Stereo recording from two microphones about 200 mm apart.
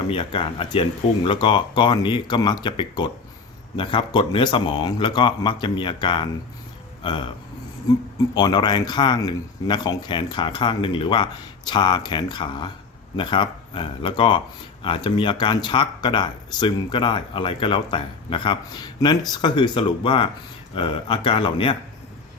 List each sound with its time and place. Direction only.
0.1 s speech: 25° left (ahead or behind)
8.4 s speech: 20° left (ahead or behind)